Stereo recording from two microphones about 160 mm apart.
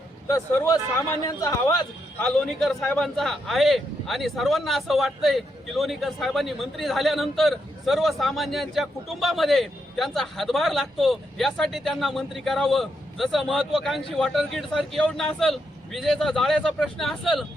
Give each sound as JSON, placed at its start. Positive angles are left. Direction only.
{"t": 0.3, "sound": "speech", "side_deg": 20}
{"t": 2.2, "sound": "speech", "side_deg": 5}